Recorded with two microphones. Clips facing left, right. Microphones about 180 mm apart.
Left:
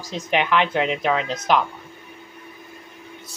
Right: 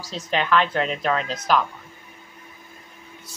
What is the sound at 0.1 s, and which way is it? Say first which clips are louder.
Speech: left 1 dB; 15° left (ahead or behind).